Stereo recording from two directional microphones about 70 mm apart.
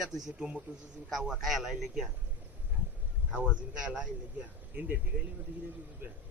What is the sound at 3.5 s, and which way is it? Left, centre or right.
A man's voice, centre.